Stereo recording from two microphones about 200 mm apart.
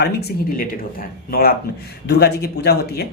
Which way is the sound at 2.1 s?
55° left (ahead or behind).